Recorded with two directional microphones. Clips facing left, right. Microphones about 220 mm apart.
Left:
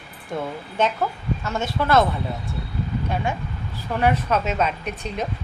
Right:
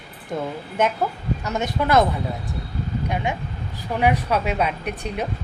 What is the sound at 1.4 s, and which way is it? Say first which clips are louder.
Speech: right 1 dB; 20° right (ahead or behind).